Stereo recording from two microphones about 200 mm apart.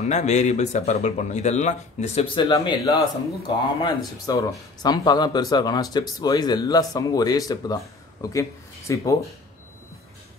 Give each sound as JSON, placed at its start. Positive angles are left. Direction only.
{"t": 0.0, "sound": "speech", "side_deg": 35}